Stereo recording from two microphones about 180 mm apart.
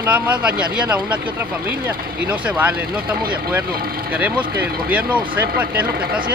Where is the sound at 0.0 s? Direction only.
10° right (ahead or behind).